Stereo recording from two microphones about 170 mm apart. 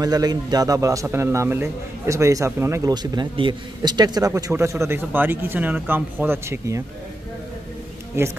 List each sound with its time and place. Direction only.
0.0 s a man's voice: 20° right (ahead or behind)
8.2 s a man's voice: 15° right (ahead or behind)